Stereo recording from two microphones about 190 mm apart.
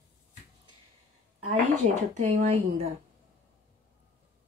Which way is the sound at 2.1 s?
35° right (ahead or behind).